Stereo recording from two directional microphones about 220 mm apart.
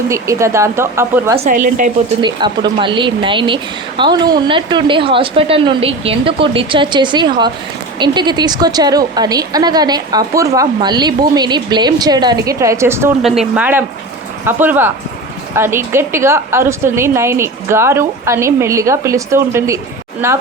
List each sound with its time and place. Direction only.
0.1 s a woman's voice: 15° right (ahead or behind)
1.5 s a woman's voice: 35° right (ahead or behind)
2.2 s a woman's voice: 20° right (ahead or behind)